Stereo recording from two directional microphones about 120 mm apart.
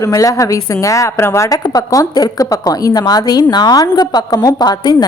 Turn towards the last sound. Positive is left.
turn(degrees=35)  # may be behind; listen again after turning